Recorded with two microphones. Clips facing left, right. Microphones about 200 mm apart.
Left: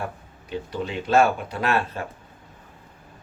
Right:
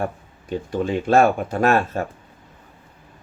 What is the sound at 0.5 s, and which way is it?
Speech, 50° right (ahead or behind).